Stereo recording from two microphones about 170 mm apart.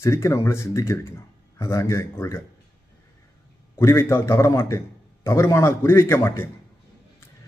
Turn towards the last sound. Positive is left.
turn(degrees=15)  # may be behind; listen again after turning